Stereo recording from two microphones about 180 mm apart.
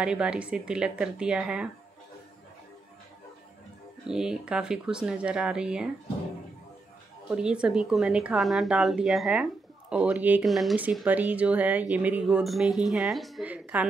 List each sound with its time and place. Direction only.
0.0 s speech: 5° right (ahead or behind)
4.1 s speech: 5° right (ahead or behind)
7.2 s speech: 5° right (ahead or behind)